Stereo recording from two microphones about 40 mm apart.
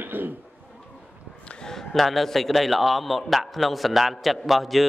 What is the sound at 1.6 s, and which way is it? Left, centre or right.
A man's voice, centre.